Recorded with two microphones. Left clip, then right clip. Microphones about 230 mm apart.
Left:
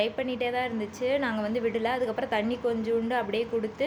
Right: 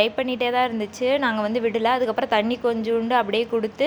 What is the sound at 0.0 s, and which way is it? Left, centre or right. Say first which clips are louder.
A woman's voice: right 7 dB; centre.